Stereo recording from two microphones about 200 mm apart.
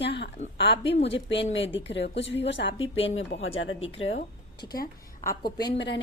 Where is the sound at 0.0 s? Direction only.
60° left (ahead or behind); by 3.8 s 75° left (ahead or behind).